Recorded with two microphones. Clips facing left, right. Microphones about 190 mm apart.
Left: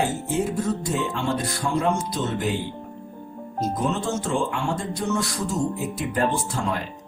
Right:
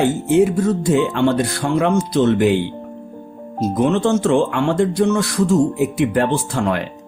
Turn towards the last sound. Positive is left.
turn(degrees=-70)  # may be behind; listen again after turning